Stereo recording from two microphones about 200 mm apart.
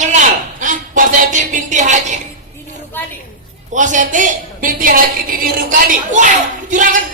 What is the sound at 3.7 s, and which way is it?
A woman's voice, 40° right (ahead or behind).